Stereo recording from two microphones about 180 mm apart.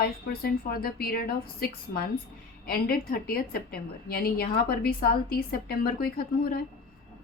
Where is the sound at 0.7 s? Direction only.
55° left (ahead or behind).